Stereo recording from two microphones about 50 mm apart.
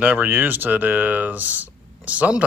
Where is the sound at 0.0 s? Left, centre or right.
Right.